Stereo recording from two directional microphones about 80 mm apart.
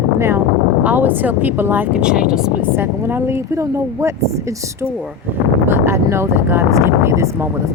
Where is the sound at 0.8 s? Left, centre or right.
Right.